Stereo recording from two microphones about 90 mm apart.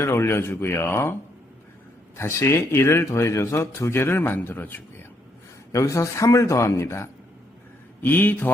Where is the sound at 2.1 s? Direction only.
30° left (ahead or behind).